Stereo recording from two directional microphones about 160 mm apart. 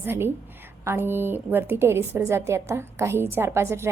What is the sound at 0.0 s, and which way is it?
A woman's voice, 15° right (ahead or behind).